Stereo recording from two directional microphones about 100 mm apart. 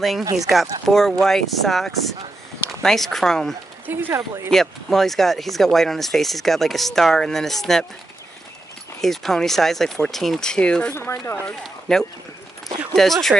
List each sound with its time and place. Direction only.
0.2 s speech: 35° right (ahead or behind)
0.8 s speech: 5° left (ahead or behind)
3.8 s speech: 20° right (ahead or behind)
4.5 s speech: 5° left (ahead or behind)
9.0 s speech: 5° left (ahead or behind)
11.0 s speech: 30° left (ahead or behind)
11.6 s speech: 5° left (ahead or behind)